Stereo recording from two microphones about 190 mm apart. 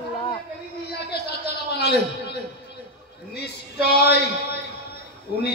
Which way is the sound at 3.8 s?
60° left (ahead or behind).